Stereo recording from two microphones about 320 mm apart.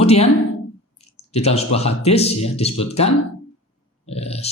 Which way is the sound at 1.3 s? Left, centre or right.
Centre.